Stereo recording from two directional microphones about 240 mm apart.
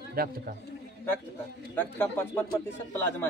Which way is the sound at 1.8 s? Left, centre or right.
Centre.